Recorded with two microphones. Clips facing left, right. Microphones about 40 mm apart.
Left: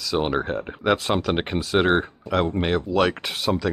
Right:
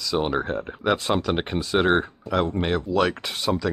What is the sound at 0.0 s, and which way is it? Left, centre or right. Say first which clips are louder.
Speech: left 1 dB; centre.